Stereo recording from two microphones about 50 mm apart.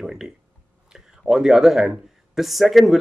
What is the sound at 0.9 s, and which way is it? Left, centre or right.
Speech, centre.